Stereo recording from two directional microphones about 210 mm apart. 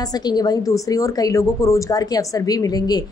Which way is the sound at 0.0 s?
20° left (ahead or behind).